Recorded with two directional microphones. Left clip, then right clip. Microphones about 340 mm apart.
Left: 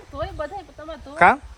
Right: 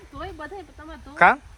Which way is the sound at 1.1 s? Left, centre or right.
Centre.